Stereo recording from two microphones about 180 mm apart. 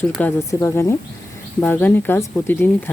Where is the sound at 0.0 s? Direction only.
10° left (ahead or behind).